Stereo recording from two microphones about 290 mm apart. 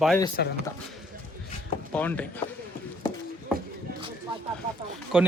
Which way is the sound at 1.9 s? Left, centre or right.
Centre.